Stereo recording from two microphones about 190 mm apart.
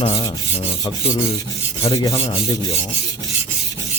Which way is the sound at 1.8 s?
20° left (ahead or behind).